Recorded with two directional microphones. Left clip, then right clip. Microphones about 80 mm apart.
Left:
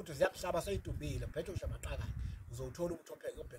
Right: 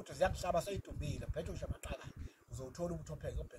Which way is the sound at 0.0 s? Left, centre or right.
Left.